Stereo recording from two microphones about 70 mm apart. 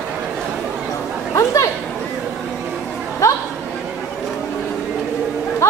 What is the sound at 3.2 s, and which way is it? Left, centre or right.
Chatter, left.